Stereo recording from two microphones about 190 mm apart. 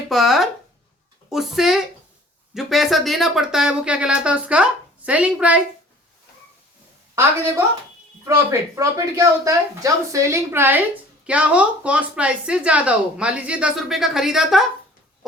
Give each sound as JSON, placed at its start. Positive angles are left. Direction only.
{"t": 0.1, "sound": "speech", "side_deg": 0}
{"t": 8.2, "sound": "speech", "side_deg": -15}